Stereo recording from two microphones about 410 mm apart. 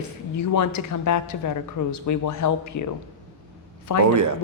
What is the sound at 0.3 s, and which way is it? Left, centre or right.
Speech, left.